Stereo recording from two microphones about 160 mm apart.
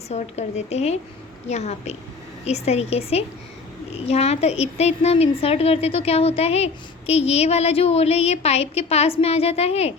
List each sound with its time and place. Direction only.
0.1 s a woman's voice: 45° left (ahead or behind)